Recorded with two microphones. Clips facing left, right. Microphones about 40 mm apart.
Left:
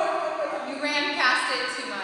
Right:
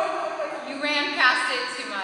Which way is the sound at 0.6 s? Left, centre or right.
Right.